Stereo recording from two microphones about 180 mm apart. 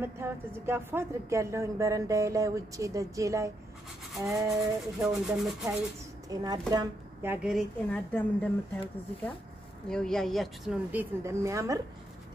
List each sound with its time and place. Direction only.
0.0 s a woman's voice: 10° right (ahead or behind)
4.1 s rub: centre (ahead or behind)
4.5 s speech: centre (ahead or behind)
6.2 s speech: 20° right (ahead or behind)
7.4 s speech: centre (ahead or behind)
8.1 s speech: 10° left (ahead or behind)
9.8 s speech: 5° left (ahead or behind); by 11.8 s 15° right (ahead or behind)